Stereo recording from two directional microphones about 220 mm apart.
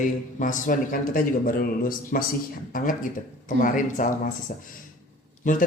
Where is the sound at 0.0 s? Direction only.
35° left (ahead or behind).